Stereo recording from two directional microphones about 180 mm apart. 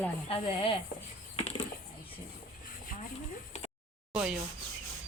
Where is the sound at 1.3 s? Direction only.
35° left (ahead or behind).